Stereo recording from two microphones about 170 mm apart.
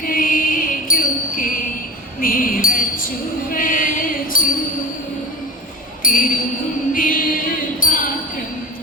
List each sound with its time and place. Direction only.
0.0 s music: 55° left (ahead or behind)
2.2 s speech: 55° left (ahead or behind)
3.5 s music: 55° left (ahead or behind)
6.0 s speech: 55° left (ahead or behind)
6.9 s music: 55° left (ahead or behind)